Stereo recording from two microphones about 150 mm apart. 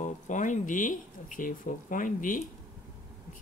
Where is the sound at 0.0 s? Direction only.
55° left (ahead or behind).